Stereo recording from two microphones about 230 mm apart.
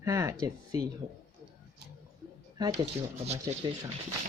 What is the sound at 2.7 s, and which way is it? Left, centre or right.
Speech, right.